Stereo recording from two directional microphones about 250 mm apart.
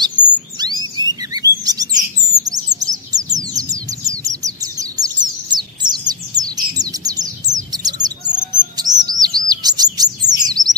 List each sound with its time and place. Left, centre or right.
0.0 s bird vocalization: centre
0.9 s chirp: centre
8.8 s chirp: right
9.2 s chirp: centre